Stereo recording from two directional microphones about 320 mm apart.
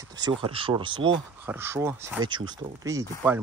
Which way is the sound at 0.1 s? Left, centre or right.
Centre.